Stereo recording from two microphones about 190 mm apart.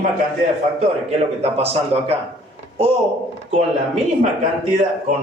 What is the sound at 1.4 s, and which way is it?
Speech, 35° right (ahead or behind).